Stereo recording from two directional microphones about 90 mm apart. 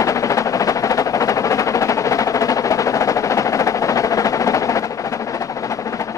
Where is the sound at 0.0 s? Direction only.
35° left (ahead or behind).